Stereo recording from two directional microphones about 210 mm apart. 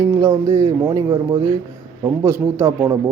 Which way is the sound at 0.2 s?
10° right (ahead or behind).